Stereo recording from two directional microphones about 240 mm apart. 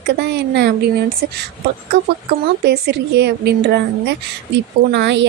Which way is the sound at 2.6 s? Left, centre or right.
Right.